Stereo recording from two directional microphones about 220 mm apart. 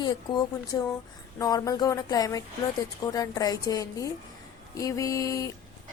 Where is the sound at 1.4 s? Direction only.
15° left (ahead or behind).